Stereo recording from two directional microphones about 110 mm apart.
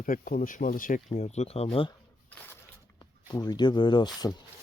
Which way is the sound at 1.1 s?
90° left.